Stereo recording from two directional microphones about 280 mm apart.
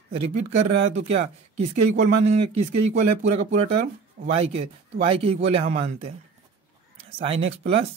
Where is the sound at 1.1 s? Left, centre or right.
Right.